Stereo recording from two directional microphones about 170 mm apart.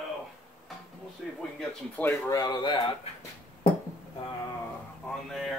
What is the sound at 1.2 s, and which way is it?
Speech, centre (ahead or behind).